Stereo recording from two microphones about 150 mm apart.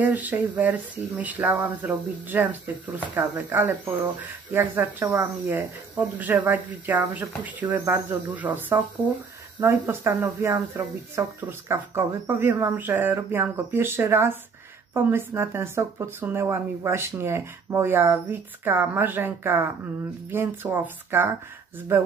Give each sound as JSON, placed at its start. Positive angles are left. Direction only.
{"t": 0.0, "sound": "speech", "side_deg": -10}